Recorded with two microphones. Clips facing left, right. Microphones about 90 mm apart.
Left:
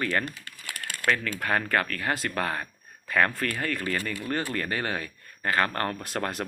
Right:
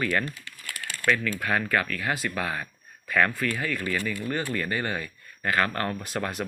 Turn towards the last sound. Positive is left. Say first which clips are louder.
# even
turn(degrees=45)  # may be behind; listen again after turning